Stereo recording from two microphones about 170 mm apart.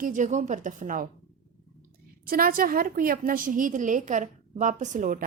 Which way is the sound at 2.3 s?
60° right (ahead or behind).